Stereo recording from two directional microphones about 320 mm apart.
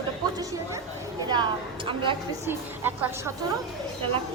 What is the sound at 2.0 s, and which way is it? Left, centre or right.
Speech, centre.